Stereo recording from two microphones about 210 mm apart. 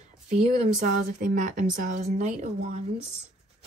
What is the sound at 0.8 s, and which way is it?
Speech, 40° right (ahead or behind).